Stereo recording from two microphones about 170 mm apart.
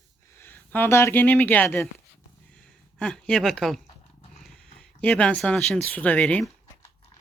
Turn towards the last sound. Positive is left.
turn(degrees=5)  # may be behind; listen again after turning